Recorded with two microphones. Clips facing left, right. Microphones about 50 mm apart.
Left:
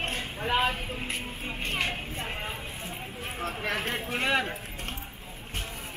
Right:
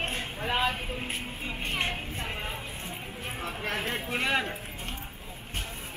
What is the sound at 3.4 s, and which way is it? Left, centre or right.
Speech, left.